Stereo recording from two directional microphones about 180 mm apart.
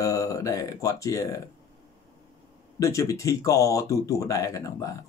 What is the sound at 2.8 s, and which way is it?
Speech, 15° left (ahead or behind).